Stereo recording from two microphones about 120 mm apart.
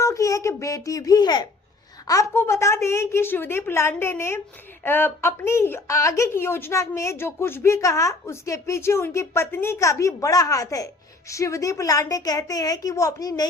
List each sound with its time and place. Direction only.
0.0 s speech: 25° left (ahead or behind)
2.0 s a woman's voice: 25° left (ahead or behind)